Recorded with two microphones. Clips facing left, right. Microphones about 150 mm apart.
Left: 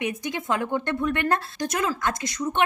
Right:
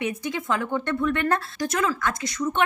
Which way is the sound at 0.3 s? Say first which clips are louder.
Left 1 dB; 20° left (ahead or behind).